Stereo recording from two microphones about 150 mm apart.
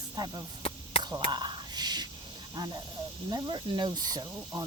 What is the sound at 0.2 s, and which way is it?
Speech, 30° right (ahead or behind).